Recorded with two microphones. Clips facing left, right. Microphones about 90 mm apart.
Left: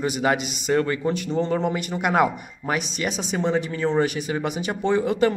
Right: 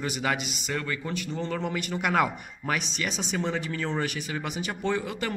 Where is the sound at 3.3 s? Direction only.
25° left (ahead or behind).